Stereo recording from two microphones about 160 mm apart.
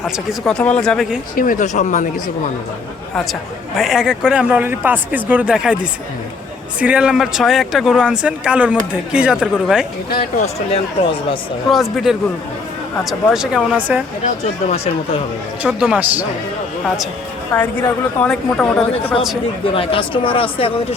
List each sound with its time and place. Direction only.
0.0 s speech: 5° left (ahead or behind)
1.4 s speech: 55° left (ahead or behind)
3.8 s speech: 5° right (ahead or behind)
10.1 s speech: 65° left (ahead or behind)
10.4 s speech: 40° left (ahead or behind)
11.7 s speech: centre (ahead or behind)
15.6 s speech: 5° right (ahead or behind)
17.5 s a woman's voice: 10° left (ahead or behind)
19.6 s speech: 35° left (ahead or behind)